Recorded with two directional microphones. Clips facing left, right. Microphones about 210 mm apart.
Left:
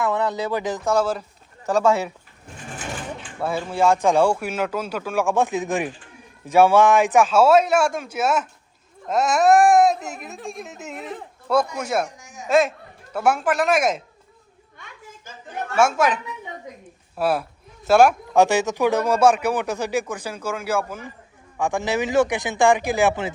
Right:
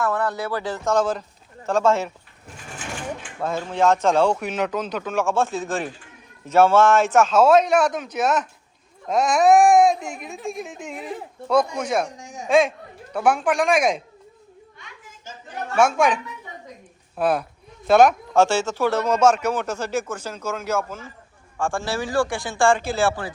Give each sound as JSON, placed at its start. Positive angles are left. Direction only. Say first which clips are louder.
{"t": 0.0, "sound": "speech", "louder": "left 1 dB", "side_deg": 20}
{"t": 3.4, "sound": "speech", "louder": "even", "side_deg": 10}
{"t": 11.8, "sound": "speech", "louder": "right 1 dB", "side_deg": 5}
{"t": 15.7, "sound": "speech", "louder": "right 1 dB", "side_deg": 5}